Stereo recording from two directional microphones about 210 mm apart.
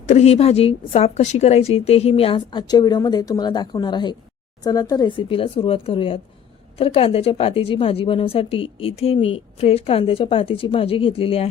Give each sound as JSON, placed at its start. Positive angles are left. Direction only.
{"t": 0.1, "sound": "a woman's voice", "side_deg": 30}